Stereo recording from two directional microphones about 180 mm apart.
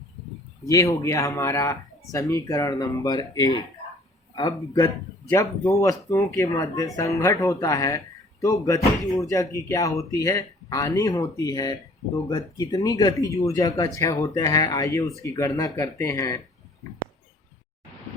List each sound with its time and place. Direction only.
0.6 s speech: 20° left (ahead or behind)